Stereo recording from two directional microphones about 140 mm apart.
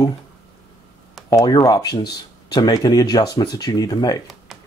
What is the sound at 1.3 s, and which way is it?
Speech, 25° left (ahead or behind).